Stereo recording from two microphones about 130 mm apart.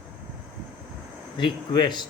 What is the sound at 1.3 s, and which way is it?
Speech, 35° left (ahead or behind).